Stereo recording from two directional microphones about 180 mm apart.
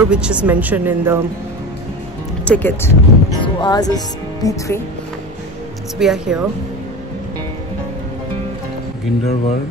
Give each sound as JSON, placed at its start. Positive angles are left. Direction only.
{"t": 0.1, "sound": "speech", "side_deg": -5}
{"t": 2.4, "sound": "speech", "side_deg": 10}
{"t": 5.9, "sound": "speech", "side_deg": -5}
{"t": 9.2, "sound": "speech", "side_deg": 35}